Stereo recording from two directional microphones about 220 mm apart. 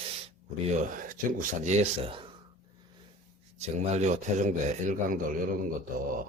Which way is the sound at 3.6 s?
30° right (ahead or behind).